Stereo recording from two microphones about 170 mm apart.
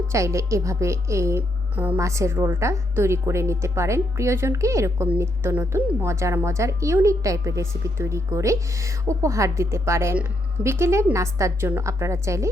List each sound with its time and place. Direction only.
0.1 s a woman's voice: 15° right (ahead or behind)